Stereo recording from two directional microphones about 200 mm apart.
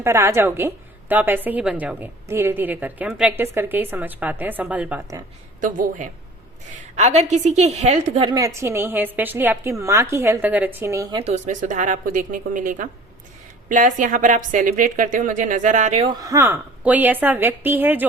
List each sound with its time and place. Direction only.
0.0 s a woman's voice: 15° right (ahead or behind)
5.5 s a woman's voice: 40° right (ahead or behind)
8.4 s a woman's voice: 15° right (ahead or behind)
11.2 s a woman's voice: 35° right (ahead or behind)
16.1 s a woman's voice: 15° right (ahead or behind)